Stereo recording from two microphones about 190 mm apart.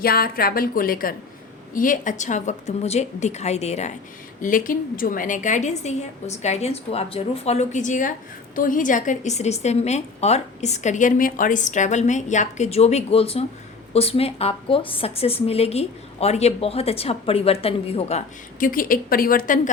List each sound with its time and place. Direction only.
0.0 s a woman's voice: 50° left (ahead or behind); by 3.9 s 35° left (ahead or behind)
4.4 s a woman's voice: 45° left (ahead or behind)
18.6 s a woman's voice: 45° left (ahead or behind)